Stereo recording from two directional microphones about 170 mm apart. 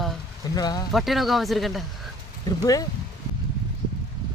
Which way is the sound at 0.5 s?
25° left (ahead or behind).